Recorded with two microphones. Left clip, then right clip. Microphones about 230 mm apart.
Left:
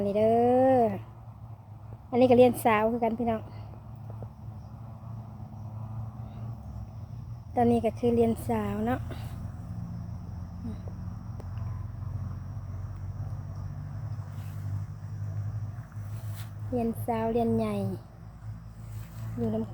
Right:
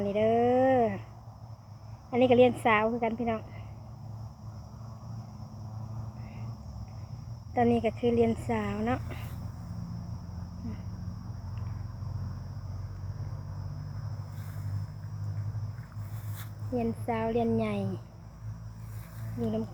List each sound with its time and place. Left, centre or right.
0.0 s a sound: centre
2.0 s a woman's voice: left
7.5 s speech: centre
16.7 s speech: centre